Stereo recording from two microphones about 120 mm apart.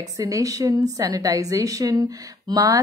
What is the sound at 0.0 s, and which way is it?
Speech, 30° right (ahead or behind).